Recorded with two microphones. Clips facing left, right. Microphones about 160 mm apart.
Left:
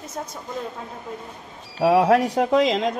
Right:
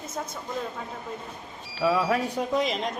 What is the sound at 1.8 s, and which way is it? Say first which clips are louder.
Speech: left 7 dB; 70° left (ahead or behind).